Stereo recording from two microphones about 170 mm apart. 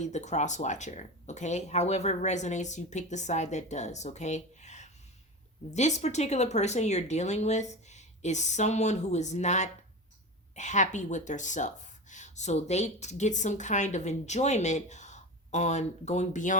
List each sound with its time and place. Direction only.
0.0 s speech: 45° left (ahead or behind)